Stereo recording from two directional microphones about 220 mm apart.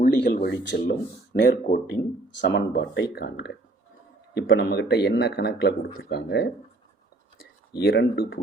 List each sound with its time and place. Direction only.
0.0 s speech: 40° left (ahead or behind)
0.6 s a man's voice: 55° left (ahead or behind)
7.7 s a man's voice: 45° left (ahead or behind)